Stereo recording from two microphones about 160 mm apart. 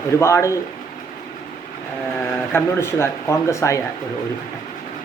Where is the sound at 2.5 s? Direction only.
15° left (ahead or behind).